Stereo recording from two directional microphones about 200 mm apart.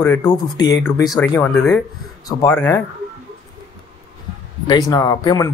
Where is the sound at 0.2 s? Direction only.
20° left (ahead or behind).